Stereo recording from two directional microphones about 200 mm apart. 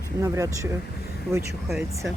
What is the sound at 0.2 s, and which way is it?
Speech, 15° right (ahead or behind).